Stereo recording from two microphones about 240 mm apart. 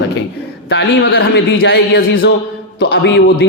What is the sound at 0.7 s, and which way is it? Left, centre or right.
A man's voice, left.